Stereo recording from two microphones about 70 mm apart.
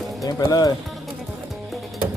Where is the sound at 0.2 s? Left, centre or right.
Left.